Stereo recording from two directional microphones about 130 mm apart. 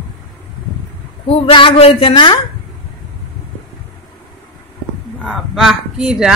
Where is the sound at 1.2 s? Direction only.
45° left (ahead or behind).